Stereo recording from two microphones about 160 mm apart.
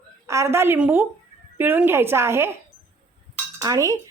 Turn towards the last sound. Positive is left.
turn(degrees=-20)  # may be behind; listen again after turning